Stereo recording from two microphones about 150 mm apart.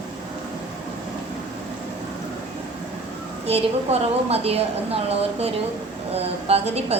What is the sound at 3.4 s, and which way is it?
A woman's voice, 45° right (ahead or behind).